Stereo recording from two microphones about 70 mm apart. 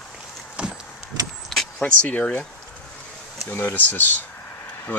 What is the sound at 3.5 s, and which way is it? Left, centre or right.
Speech, left.